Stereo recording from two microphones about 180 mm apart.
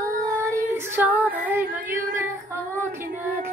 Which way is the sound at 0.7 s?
15° right (ahead or behind).